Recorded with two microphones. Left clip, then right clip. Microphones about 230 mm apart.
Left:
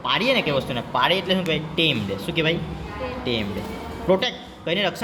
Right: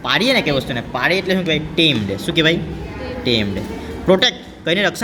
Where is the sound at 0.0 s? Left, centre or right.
Right.